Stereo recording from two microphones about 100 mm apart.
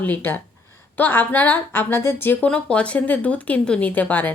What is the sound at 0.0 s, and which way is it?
A woman's voice, 20° left (ahead or behind).